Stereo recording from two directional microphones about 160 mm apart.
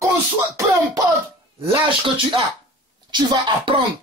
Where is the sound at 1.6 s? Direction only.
30° right (ahead or behind).